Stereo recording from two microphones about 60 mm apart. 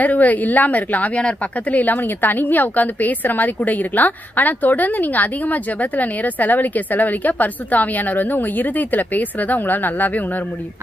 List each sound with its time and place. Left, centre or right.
0.0 s a woman's voice: left